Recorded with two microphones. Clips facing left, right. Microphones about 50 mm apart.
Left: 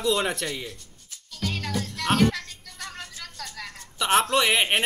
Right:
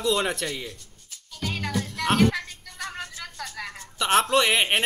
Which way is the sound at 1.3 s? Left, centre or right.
Centre.